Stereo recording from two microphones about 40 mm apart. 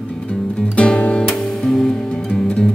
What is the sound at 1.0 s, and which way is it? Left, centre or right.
Music, left.